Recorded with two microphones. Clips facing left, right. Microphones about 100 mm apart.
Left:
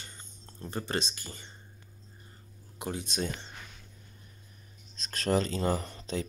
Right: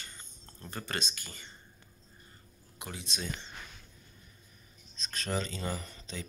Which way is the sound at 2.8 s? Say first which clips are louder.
Left 7 dB; 45° left (ahead or behind).